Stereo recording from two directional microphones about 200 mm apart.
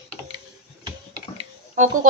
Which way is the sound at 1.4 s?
40° right (ahead or behind).